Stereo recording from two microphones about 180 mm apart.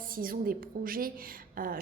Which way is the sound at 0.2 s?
55° right (ahead or behind).